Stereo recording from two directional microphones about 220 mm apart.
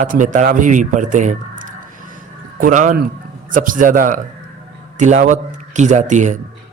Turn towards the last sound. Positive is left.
turn(degrees=-35)  # may be behind; listen again after turning